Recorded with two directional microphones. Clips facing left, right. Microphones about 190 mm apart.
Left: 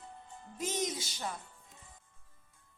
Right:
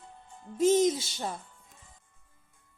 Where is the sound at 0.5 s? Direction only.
25° right (ahead or behind).